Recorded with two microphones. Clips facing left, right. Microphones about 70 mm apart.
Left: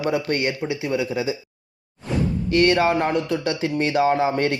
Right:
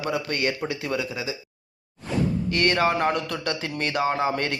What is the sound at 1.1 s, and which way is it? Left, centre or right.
Speech, left.